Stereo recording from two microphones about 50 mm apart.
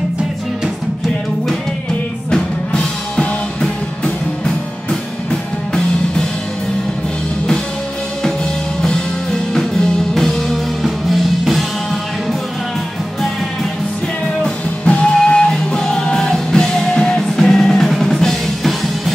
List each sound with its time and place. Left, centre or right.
4.0 s music: centre
9.5 s music: centre
14.4 s music: centre